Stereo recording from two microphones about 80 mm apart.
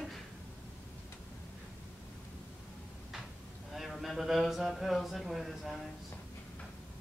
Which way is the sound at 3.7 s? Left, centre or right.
Centre.